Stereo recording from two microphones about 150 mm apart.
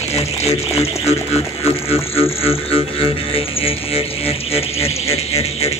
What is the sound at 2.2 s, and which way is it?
Music, 40° left (ahead or behind).